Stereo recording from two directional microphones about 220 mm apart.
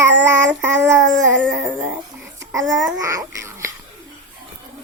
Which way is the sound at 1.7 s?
5° right (ahead or behind).